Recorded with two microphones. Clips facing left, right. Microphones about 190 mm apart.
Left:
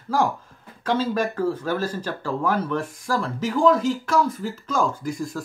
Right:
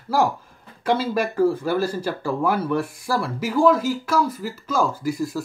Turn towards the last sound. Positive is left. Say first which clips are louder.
# right 4 dB
turn(degrees=-5)  # may be behind; listen again after turning